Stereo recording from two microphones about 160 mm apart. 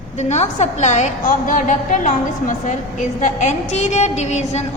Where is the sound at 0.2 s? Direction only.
45° left (ahead or behind).